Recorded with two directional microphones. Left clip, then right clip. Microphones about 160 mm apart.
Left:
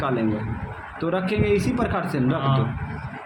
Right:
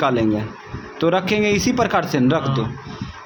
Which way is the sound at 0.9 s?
40° right (ahead or behind).